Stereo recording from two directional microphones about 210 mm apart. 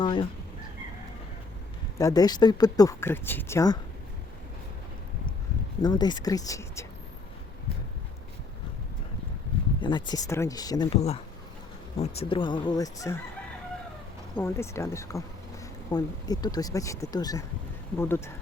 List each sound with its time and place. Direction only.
0.0 s speech: 25° left (ahead or behind)
2.0 s speech: 15° left (ahead or behind)
5.8 s speech: 20° left (ahead or behind)
9.8 s speech: 20° left (ahead or behind)
11.9 s speech: 30° left (ahead or behind)
14.3 s speech: 10° left (ahead or behind)